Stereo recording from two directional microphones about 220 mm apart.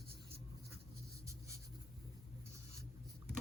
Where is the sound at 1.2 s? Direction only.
15° right (ahead or behind).